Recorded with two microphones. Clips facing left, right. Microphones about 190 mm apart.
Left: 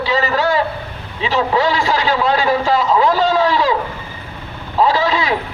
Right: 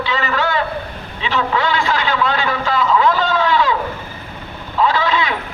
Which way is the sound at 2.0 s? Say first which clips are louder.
Left 3 dB; 40° left (ahead or behind).